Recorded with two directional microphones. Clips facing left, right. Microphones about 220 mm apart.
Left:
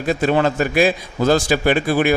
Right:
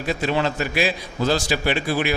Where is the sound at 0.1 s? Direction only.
50° left (ahead or behind).